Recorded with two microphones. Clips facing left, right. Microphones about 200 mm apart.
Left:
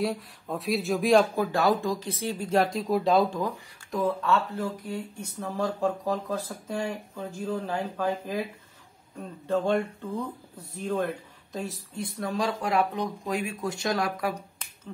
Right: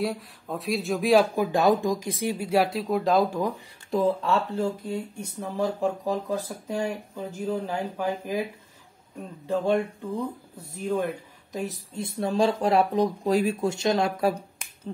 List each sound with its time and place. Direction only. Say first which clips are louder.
0.0 s speech: even; centre (ahead or behind)
1.3 s speech: right 3 dB; 15° right (ahead or behind)
3.9 s speech: right 2 dB; 30° right (ahead or behind)
5.6 s speech: right 2 dB; 15° right (ahead or behind)
9.5 s speech: right 1 dB; 10° right (ahead or behind)
11.5 s speech: right 2 dB; 20° right (ahead or behind)